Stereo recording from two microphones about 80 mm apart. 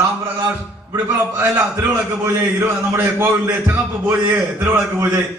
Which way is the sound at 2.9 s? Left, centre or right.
Right.